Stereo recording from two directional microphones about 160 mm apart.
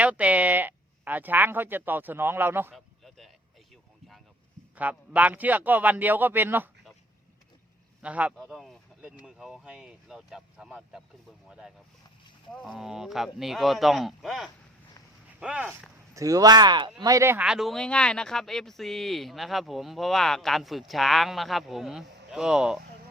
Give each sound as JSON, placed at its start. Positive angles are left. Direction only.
{"t": 0.0, "sound": "speech", "side_deg": -10}
{"t": 2.7, "sound": "a sound", "side_deg": 0}
{"t": 4.7, "sound": "speech", "side_deg": -10}
{"t": 8.0, "sound": "speech", "side_deg": -10}
{"t": 16.1, "sound": "speech", "side_deg": -20}
{"t": 17.4, "sound": "speech", "side_deg": -5}